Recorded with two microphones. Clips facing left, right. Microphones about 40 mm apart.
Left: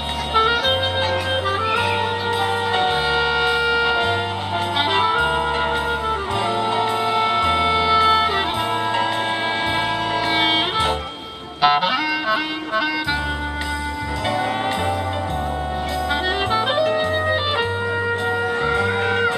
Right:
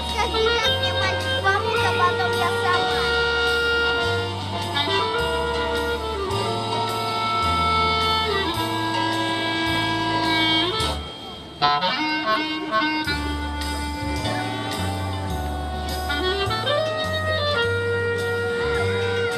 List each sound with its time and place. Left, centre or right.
0.3 s music: left
9.8 s music: left
11.6 s music: centre
12.3 s violin: centre
16.3 s music: left
18.7 s music: left